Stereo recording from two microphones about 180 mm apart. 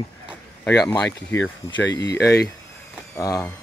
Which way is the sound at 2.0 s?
65° left (ahead or behind).